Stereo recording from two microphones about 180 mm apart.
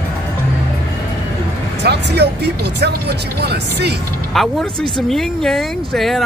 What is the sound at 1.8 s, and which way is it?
Speech, 70° right (ahead or behind).